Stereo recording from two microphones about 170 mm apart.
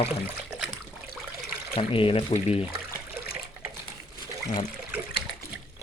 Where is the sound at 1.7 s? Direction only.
30° left (ahead or behind).